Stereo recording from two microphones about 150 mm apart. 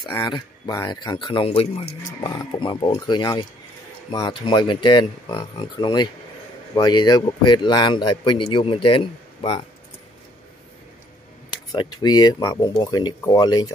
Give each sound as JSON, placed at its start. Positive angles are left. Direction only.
{"t": 0.1, "sound": "speech", "side_deg": 30}
{"t": 11.7, "sound": "speech", "side_deg": 30}